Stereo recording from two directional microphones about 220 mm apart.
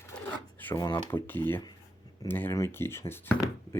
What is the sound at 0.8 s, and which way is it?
Speech, 20° left (ahead or behind).